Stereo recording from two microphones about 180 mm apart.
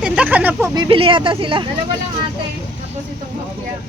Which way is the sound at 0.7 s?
25° right (ahead or behind).